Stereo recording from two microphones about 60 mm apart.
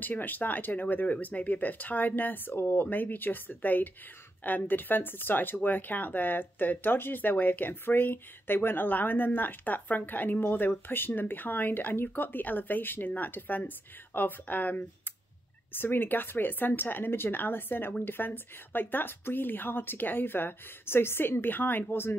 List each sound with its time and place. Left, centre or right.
0.0 s speech: left